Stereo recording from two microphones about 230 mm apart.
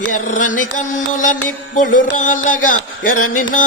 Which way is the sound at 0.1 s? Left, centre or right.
Left.